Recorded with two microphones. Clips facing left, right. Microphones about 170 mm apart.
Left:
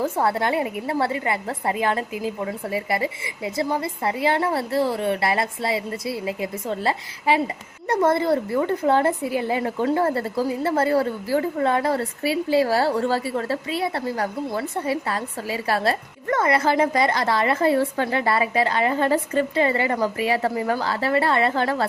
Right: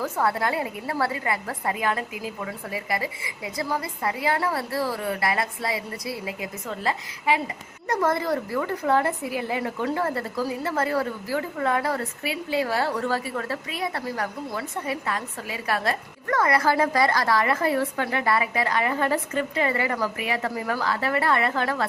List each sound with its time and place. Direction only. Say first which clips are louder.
0.0 s a woman's voice: left 3 dB; 25° left (ahead or behind)